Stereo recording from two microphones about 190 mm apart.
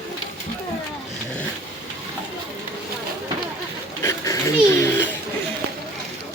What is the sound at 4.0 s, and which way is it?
Speech, 15° left (ahead or behind).